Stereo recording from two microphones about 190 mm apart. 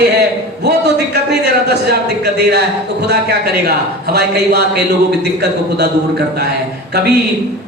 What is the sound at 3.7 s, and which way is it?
Speech, 60° right (ahead or behind).